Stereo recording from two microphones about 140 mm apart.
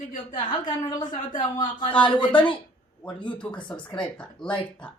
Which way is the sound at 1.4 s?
30° left (ahead or behind).